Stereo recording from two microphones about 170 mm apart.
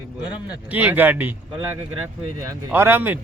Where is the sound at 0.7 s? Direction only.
10° right (ahead or behind).